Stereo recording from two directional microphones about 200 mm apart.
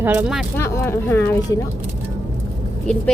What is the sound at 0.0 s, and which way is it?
Speech, 5° right (ahead or behind).